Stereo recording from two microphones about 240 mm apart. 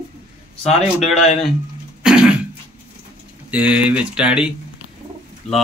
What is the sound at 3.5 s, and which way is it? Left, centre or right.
Speech, centre.